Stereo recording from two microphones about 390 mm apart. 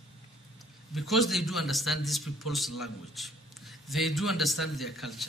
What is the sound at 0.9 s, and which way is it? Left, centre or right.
Speech, centre.